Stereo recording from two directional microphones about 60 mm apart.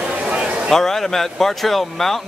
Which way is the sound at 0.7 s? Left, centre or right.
Centre.